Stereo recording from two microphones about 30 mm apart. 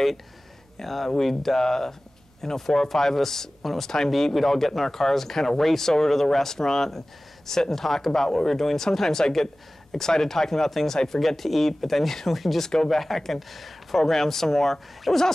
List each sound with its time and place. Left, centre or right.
0.7 s speech: centre
12.6 s speech: centre